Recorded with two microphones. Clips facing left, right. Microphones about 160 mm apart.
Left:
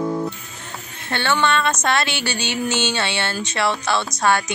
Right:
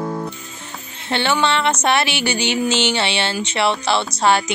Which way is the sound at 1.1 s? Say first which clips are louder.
Right 1 dB; 20° right (ahead or behind).